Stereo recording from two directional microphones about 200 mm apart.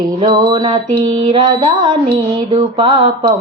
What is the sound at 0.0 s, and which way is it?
Child singing, 20° right (ahead or behind).